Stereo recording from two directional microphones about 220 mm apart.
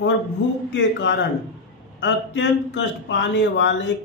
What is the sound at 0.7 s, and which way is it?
A man's voice, 50° left (ahead or behind).